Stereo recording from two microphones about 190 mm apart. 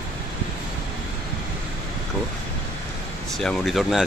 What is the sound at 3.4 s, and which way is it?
Speech, centre (ahead or behind).